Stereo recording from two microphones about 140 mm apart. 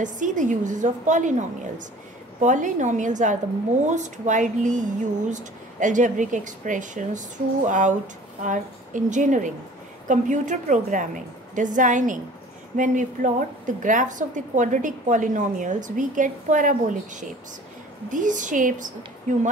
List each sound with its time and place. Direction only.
0.0 s a woman's voice: 65° right (ahead or behind)
2.4 s a woman's voice: 60° right (ahead or behind)